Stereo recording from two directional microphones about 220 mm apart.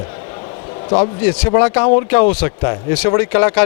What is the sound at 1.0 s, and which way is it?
Speech, 10° left (ahead or behind).